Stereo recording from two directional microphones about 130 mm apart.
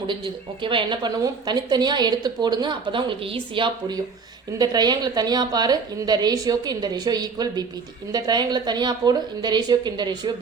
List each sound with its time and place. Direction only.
0.6 s a woman's voice: 40° right (ahead or behind)